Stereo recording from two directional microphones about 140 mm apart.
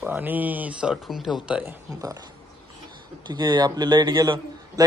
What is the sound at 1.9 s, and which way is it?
Speech, 25° right (ahead or behind).